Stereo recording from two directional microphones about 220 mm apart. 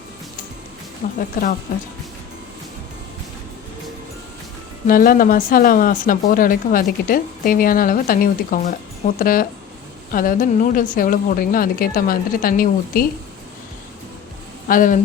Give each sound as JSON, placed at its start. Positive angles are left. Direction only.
{"t": 1.0, "sound": "a woman's voice", "side_deg": 40}
{"t": 4.9, "sound": "a woman's voice", "side_deg": 40}
{"t": 14.7, "sound": "a woman's voice", "side_deg": 35}